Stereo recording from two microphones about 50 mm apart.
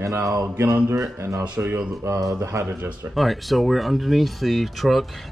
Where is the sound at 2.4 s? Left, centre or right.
Right.